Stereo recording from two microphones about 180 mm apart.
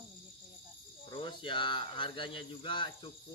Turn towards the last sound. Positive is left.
turn(degrees=25)  # may be behind; listen again after turning